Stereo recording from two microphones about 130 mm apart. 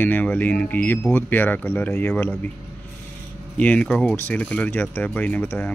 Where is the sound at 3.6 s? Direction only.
10° left (ahead or behind).